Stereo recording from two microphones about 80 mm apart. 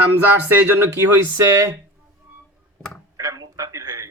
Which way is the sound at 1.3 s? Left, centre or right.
Right.